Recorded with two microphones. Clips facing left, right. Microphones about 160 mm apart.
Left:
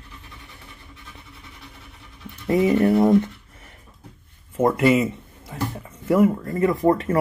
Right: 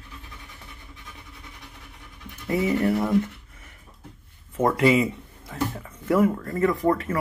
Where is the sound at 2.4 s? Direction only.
20° left (ahead or behind).